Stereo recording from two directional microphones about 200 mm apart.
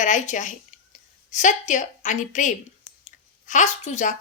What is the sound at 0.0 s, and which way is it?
A woman's voice, 40° left (ahead or behind).